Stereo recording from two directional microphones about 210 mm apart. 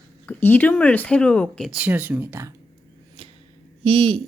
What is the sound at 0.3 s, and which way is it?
Speech, 10° left (ahead or behind).